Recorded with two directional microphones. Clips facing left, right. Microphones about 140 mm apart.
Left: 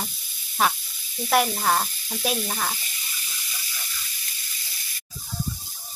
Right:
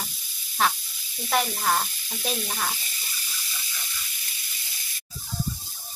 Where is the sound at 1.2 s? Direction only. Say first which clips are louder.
Left 3 dB; 5° left (ahead or behind).